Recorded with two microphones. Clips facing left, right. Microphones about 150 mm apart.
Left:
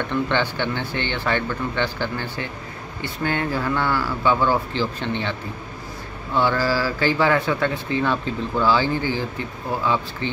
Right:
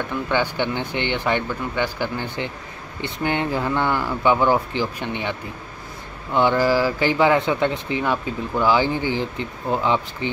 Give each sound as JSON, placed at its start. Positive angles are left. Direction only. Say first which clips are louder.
{"t": 0.1, "sound": "speech", "louder": "even", "side_deg": -10}
{"t": 6.3, "sound": "speech", "louder": "right 3 dB", "side_deg": -15}